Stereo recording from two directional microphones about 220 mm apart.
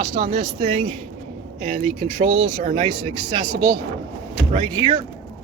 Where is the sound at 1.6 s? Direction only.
30° right (ahead or behind).